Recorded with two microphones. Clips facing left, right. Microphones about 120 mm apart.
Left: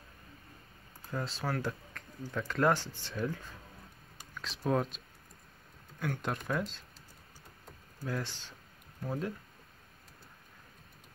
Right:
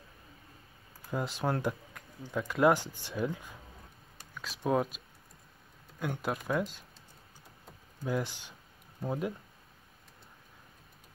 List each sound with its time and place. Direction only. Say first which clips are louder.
1.1 s speech: right 3 dB; 15° right (ahead or behind)
8.0 s speech: right 4 dB; 15° right (ahead or behind)